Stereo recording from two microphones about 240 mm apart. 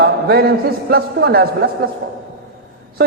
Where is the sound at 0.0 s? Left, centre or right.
Right.